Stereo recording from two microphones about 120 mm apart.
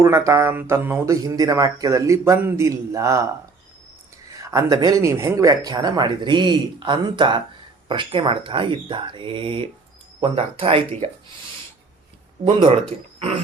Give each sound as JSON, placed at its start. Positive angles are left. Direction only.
{"t": 0.0, "sound": "speech", "side_deg": -25}
{"t": 1.0, "sound": "speech", "side_deg": -30}
{"t": 4.3, "sound": "speech", "side_deg": -30}
{"t": 12.4, "sound": "speech", "side_deg": -80}